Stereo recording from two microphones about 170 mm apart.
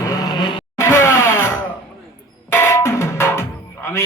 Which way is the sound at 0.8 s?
15° left (ahead or behind).